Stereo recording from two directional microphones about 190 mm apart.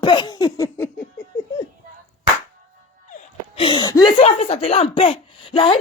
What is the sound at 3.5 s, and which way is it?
Speech, 25° left (ahead or behind).